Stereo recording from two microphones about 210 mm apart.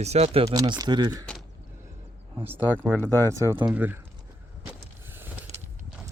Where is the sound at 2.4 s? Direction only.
10° right (ahead or behind).